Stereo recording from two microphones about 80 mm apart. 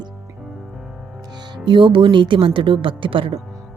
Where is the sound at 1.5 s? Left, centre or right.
Right.